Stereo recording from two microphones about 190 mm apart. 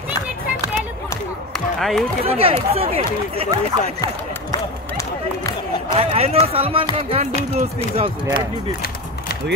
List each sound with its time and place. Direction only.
1.8 s speech: centre (ahead or behind)
2.2 s speech: 30° right (ahead or behind)
4.0 s speech: 20° left (ahead or behind)
5.9 s speech: 30° right (ahead or behind)